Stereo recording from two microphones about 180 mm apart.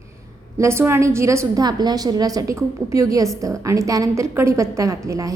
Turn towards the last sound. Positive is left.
turn(degrees=-15)  # may be behind; listen again after turning